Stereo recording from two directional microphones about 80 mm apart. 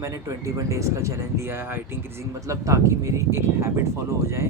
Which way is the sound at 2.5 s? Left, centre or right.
Right.